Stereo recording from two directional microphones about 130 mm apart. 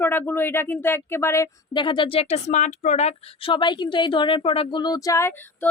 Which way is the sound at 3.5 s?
35° left (ahead or behind).